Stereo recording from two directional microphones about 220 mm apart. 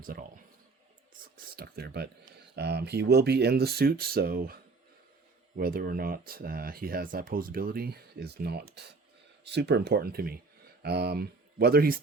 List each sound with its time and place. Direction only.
0.0 s a man's voice: 40° right (ahead or behind)
1.5 s speech: 45° right (ahead or behind)